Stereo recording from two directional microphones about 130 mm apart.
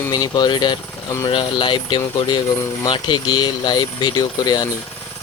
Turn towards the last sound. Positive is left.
turn(degrees=30)  # may be behind; listen again after turning